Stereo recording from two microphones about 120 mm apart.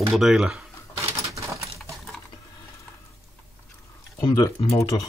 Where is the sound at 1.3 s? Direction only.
25° right (ahead or behind).